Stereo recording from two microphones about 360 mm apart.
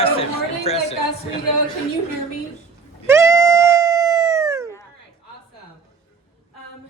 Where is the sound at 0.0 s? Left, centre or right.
Centre.